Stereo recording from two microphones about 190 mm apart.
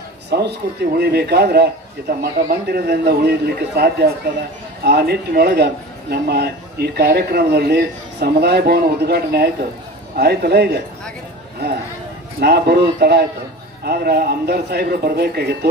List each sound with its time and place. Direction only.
0.3 s a man's voice: 60° right (ahead or behind)
12.4 s a man's voice: 55° right (ahead or behind)